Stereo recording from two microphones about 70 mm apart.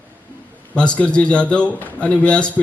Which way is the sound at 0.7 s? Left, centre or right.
Centre.